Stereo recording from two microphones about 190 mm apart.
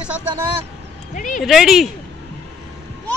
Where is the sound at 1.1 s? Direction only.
40° left (ahead or behind).